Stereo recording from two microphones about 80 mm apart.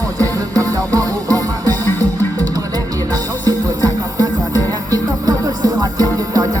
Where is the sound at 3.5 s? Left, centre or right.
Right.